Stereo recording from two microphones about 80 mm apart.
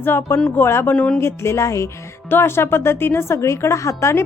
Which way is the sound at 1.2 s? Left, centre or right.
Left.